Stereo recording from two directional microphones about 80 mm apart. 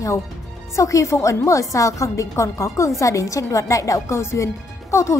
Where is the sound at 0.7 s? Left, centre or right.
Left.